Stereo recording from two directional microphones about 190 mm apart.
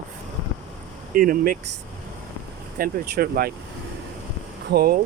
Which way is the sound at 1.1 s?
45° right (ahead or behind).